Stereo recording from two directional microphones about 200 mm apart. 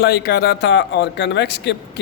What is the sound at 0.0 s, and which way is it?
Speech, 55° left (ahead or behind).